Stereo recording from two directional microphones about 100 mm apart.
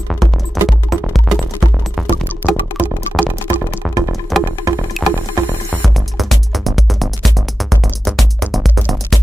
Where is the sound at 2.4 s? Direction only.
15° right (ahead or behind).